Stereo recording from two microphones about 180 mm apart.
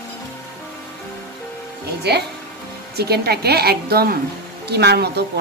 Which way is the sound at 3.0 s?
65° right (ahead or behind).